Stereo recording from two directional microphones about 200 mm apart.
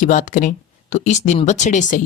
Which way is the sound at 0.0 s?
40° left (ahead or behind).